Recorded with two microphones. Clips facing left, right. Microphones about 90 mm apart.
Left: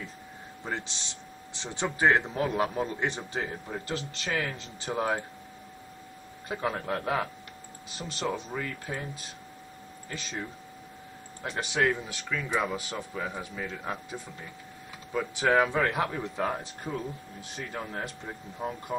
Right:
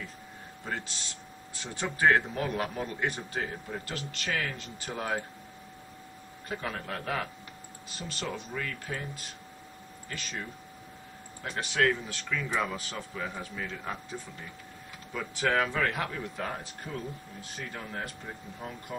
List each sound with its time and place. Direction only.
0.7 s speech: 20° left (ahead or behind)
6.5 s speech: 20° left (ahead or behind)
10.0 s speech: 20° left (ahead or behind)
11.4 s speech: 20° left (ahead or behind)
15.1 s speech: 15° left (ahead or behind)